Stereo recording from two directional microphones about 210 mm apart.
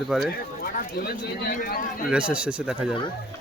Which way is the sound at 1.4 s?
45° left (ahead or behind).